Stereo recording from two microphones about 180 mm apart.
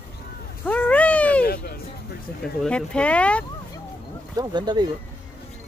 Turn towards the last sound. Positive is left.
turn(degrees=-25)  # may be behind; listen again after turning